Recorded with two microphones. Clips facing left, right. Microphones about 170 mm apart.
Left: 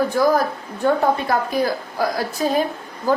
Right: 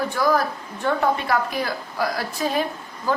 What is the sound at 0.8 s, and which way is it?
A woman's voice, 40° left (ahead or behind).